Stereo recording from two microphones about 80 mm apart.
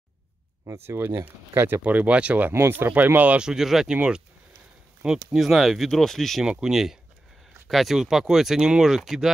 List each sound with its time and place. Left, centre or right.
0.7 s speech: right
2.5 s speech: right; by 4.2 s centre
5.3 s speech: centre
6.4 s speech: centre